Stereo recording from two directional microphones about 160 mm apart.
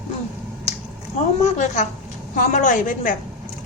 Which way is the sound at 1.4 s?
45° left (ahead or behind).